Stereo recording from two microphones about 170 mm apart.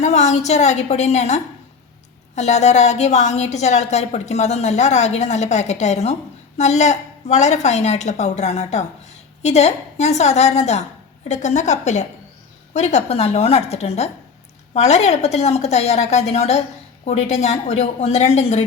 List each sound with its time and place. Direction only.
0.0 s a woman's voice: 40° left (ahead or behind)